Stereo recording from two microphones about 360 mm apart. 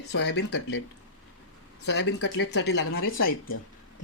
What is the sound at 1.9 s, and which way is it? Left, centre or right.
Speech, left.